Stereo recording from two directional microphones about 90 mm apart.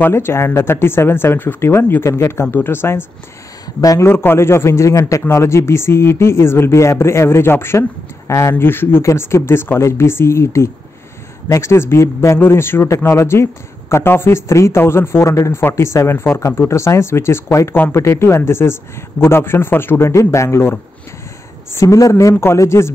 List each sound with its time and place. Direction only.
0.0 s a man's voice: 25° left (ahead or behind)
3.6 s speech: 40° left (ahead or behind)
4.0 s a man's voice: 25° left (ahead or behind)